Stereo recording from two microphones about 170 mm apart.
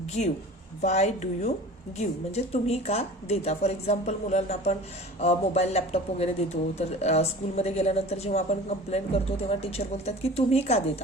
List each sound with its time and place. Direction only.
0.8 s a woman's voice: 40° left (ahead or behind)